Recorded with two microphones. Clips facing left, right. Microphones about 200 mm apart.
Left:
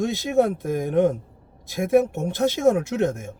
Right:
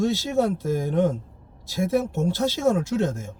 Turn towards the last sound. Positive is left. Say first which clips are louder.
# left 1 dB
turn(degrees=15)  # may be behind; listen again after turning